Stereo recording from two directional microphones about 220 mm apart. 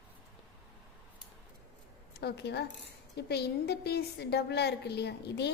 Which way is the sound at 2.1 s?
50° left (ahead or behind).